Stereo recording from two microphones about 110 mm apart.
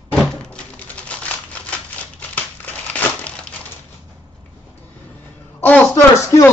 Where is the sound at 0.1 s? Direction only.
5° left (ahead or behind).